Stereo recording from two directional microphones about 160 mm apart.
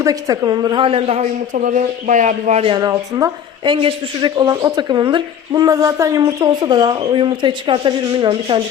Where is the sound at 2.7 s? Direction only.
25° right (ahead or behind).